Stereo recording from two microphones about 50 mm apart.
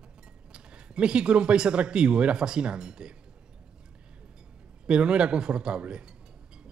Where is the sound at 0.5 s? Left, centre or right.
Centre.